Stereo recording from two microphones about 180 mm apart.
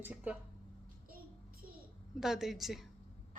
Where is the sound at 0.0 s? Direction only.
10° right (ahead or behind).